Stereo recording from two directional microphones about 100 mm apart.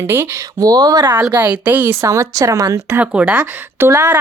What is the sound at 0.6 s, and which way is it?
Speech, 40° right (ahead or behind).